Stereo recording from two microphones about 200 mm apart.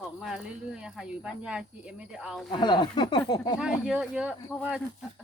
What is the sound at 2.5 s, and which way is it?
Speech, 20° left (ahead or behind).